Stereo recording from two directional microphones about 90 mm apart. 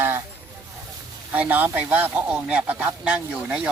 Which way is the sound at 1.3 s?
20° right (ahead or behind).